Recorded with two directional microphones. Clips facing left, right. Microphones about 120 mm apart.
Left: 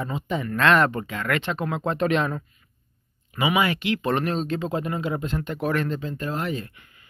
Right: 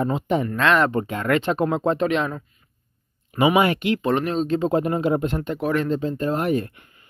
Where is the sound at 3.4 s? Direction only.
50° right (ahead or behind).